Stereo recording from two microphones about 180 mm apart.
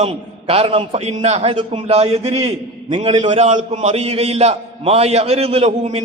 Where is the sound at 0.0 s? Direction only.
30° right (ahead or behind).